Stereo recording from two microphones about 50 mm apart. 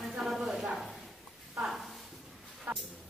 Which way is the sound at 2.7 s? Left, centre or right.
Right.